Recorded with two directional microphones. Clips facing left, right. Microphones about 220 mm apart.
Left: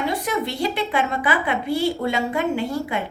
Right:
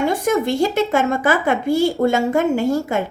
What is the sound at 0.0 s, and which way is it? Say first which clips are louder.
A woman's voice: right 6 dB; 45° right (ahead or behind).